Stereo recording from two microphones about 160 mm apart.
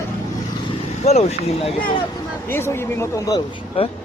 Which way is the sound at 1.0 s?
40° left (ahead or behind).